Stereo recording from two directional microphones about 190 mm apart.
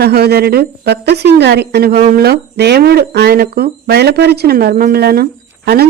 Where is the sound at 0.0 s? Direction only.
55° right (ahead or behind).